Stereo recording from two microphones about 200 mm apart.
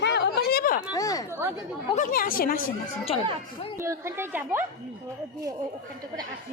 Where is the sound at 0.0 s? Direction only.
60° left (ahead or behind).